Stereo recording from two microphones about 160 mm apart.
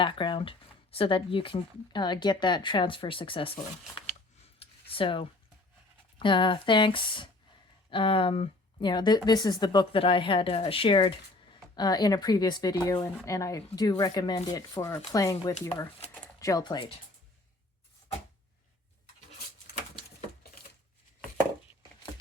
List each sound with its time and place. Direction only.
0.0 s speech: 30° left (ahead or behind)
4.6 s a sound: 35° left (ahead or behind)
6.1 s speech: 30° left (ahead or behind)